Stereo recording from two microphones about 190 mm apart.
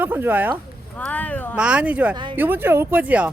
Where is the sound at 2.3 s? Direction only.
10° right (ahead or behind).